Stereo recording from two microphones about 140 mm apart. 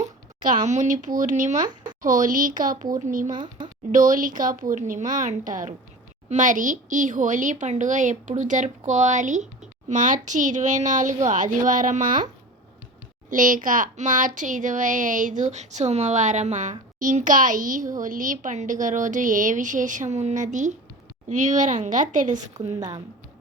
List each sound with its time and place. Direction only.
0.0 s speech: 65° right (ahead or behind)
1.6 s a sound: 30° right (ahead or behind)
2.0 s a woman's voice: 70° right (ahead or behind)
3.3 s speech: 35° right (ahead or behind)
3.9 s a woman's voice: 65° right (ahead or behind)
13.3 s a woman's voice: 70° right (ahead or behind)
22.8 s speech: 30° right (ahead or behind)